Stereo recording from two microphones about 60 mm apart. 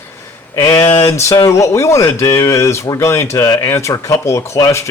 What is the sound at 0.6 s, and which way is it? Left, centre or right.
Speech, left.